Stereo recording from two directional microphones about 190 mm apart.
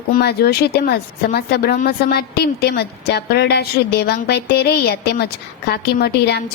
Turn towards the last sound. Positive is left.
turn(degrees=60)  # may be behind; listen again after turning